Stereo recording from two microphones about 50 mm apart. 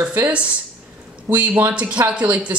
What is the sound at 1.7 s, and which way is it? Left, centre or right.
Speech, right.